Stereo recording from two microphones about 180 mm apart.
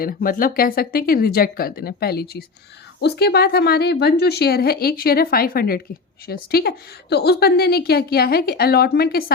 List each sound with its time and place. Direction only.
0.0 s a woman's voice: 55° left (ahead or behind)